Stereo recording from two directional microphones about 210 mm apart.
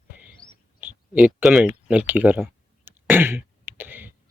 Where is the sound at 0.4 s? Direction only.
15° right (ahead or behind).